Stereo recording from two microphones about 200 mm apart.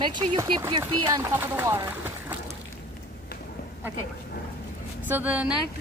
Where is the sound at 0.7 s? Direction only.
20° right (ahead or behind).